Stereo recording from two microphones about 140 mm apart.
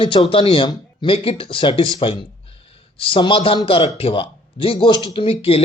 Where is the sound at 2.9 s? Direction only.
40° left (ahead or behind).